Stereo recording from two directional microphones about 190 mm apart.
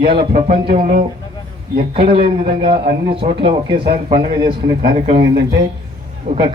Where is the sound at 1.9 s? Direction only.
25° right (ahead or behind).